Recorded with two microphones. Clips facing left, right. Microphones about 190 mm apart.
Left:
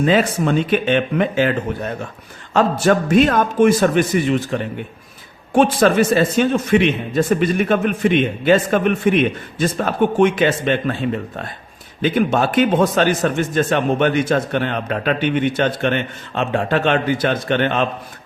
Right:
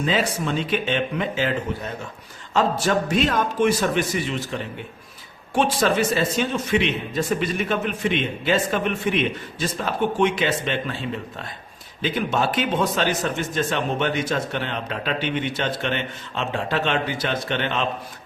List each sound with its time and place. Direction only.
0.0 s a man's voice: 55° left (ahead or behind)